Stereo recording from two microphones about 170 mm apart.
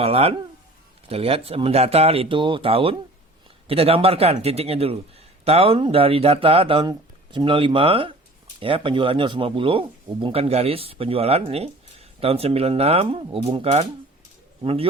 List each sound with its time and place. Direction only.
0.0 s a man's voice: 35° right (ahead or behind)